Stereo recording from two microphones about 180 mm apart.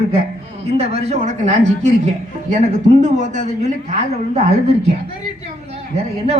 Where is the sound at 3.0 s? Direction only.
45° right (ahead or behind).